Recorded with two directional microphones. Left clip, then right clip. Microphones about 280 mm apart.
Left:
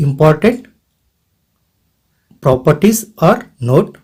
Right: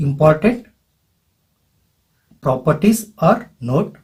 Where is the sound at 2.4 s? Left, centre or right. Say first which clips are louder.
Left 5 dB; left.